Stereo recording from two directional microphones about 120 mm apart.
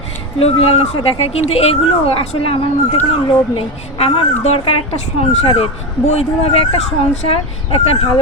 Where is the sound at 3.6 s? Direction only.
50° left (ahead or behind).